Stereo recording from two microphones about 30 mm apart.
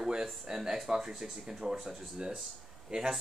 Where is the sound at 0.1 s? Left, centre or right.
Right.